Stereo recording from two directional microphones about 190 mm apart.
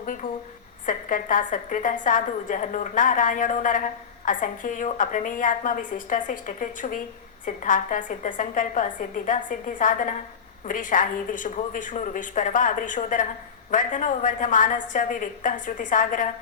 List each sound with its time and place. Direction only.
0.0 s a woman's voice: 45° left (ahead or behind)